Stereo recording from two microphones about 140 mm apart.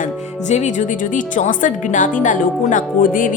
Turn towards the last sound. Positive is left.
turn(degrees=75)  # may be behind; listen again after turning